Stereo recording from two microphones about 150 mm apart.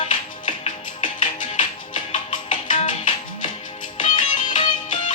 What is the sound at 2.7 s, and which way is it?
Music, 55° left (ahead or behind).